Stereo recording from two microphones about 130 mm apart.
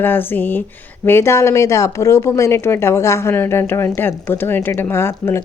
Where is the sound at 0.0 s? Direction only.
15° left (ahead or behind).